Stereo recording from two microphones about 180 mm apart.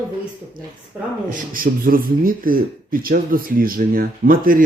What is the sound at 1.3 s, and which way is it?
Speech, 50° right (ahead or behind).